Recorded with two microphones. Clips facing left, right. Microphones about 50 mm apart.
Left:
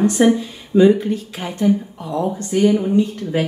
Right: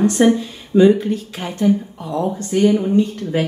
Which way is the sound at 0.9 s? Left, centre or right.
Right.